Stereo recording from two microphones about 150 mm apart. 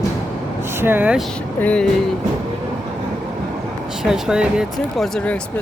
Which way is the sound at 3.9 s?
5° right (ahead or behind).